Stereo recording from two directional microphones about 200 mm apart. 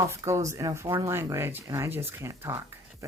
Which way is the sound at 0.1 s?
15° right (ahead or behind).